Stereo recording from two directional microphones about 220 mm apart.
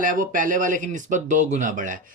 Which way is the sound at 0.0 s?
40° right (ahead or behind).